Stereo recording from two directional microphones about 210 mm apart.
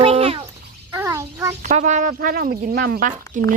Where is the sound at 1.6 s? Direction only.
35° right (ahead or behind).